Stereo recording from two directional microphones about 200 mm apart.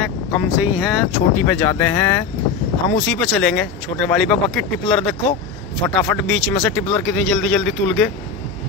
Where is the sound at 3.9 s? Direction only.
25° left (ahead or behind).